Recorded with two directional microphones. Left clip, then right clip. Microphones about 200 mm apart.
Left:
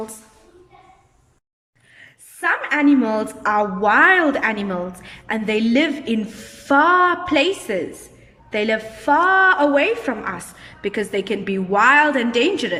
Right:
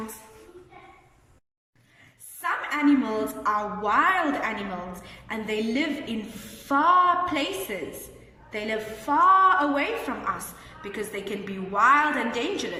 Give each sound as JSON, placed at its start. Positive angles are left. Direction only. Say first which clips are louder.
{"t": 2.4, "sound": "a woman's voice", "louder": "left 7 dB", "side_deg": 45}